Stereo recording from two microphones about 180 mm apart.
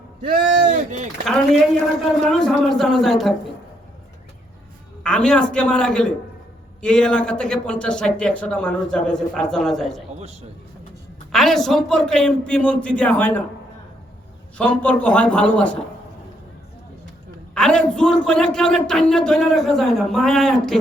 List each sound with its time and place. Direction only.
0.6 s a sound: 45° right (ahead or behind)
2.2 s a man's voice: centre (ahead or behind)
5.0 s a man's voice: 5° left (ahead or behind)
11.3 s a man's voice: centre (ahead or behind)
14.6 s a man's voice: 10° left (ahead or behind)
17.5 s a man's voice: 5° left (ahead or behind)